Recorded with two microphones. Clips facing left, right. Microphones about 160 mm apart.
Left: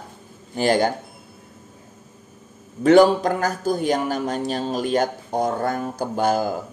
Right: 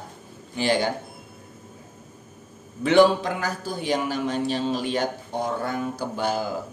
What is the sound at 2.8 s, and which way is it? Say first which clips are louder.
Speech: left 4 dB; 45° left (ahead or behind).